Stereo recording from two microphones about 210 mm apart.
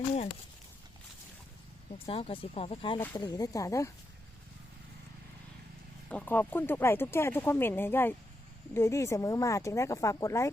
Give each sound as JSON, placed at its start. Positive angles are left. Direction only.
{"t": 2.0, "sound": "speech", "side_deg": 25}
{"t": 6.1, "sound": "speech", "side_deg": 10}